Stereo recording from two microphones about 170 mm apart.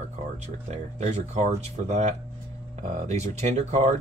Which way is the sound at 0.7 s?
40° right (ahead or behind).